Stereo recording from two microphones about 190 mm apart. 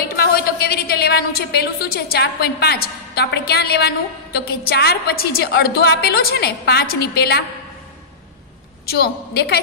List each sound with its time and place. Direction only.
0.0 s a woman's voice: 50° left (ahead or behind)
8.8 s a woman's voice: 55° left (ahead or behind)